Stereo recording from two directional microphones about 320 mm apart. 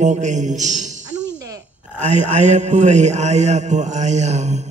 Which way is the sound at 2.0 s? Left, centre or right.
Right.